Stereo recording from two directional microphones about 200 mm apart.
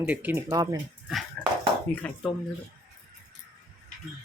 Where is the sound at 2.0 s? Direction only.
5° left (ahead or behind).